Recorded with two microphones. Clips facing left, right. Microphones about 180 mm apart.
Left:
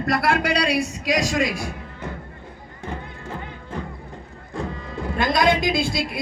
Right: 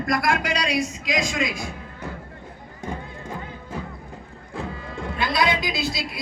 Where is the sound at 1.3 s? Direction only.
65° left (ahead or behind).